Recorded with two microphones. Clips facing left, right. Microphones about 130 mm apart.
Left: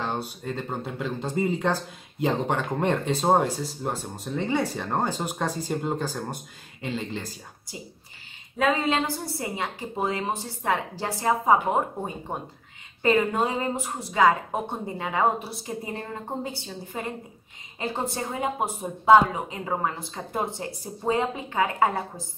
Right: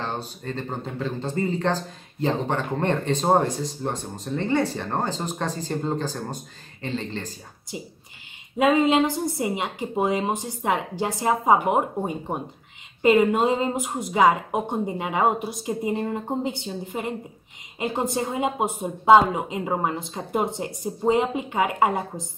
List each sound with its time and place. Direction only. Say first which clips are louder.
0.0 s speech: left 1 dB; 10° left (ahead or behind)
8.5 s a woman's voice: right 5 dB; 20° right (ahead or behind)